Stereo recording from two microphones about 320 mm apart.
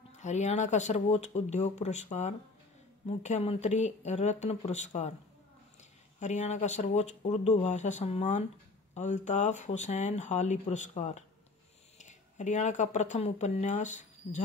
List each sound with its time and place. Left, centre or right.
0.1 s speech: left
6.1 s speech: left